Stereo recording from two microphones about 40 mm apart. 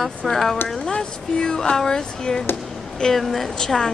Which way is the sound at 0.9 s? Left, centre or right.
Centre.